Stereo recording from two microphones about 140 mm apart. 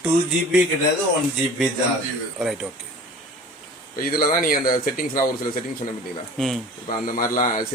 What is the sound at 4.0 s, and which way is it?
Speech, 90° left.